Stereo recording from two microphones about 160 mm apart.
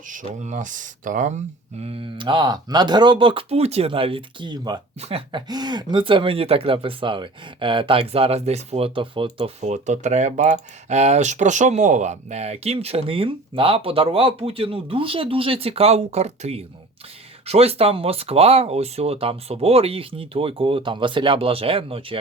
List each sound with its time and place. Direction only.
0.1 s speech: 50° right (ahead or behind)
1.8 s speech: 35° right (ahead or behind)
4.9 s speech: 40° right (ahead or behind)
9.6 s speech: 45° right (ahead or behind)